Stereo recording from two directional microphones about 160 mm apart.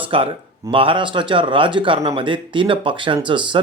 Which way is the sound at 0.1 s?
35° right (ahead or behind).